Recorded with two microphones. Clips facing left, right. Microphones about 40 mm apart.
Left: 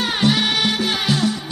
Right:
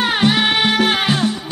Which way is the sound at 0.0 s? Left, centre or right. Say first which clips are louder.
Right 3 dB; right.